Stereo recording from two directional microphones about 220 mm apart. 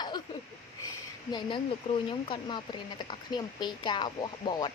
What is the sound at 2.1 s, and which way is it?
Speech, 20° left (ahead or behind).